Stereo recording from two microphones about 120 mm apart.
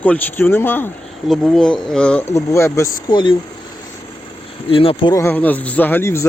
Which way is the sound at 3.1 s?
40° left (ahead or behind).